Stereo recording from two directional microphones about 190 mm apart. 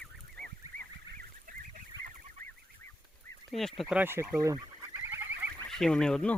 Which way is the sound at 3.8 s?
10° right (ahead or behind).